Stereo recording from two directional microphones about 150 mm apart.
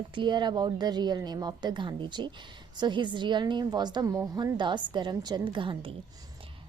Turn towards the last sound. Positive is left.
turn(degrees=-35)  # may be behind; listen again after turning